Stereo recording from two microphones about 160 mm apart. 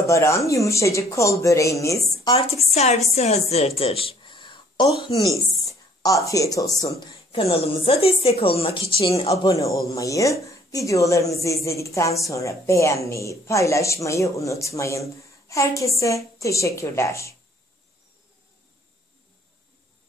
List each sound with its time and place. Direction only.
0.0 s speech: 20° left (ahead or behind)
2.3 s a woman's voice: 40° left (ahead or behind)
5.7 s speech: 20° left (ahead or behind)
7.4 s a woman's voice: 40° left (ahead or behind)
9.4 s speech: 20° left (ahead or behind)